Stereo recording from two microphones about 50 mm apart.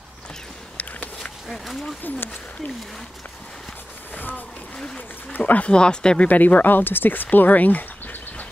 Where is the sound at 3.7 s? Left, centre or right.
Left.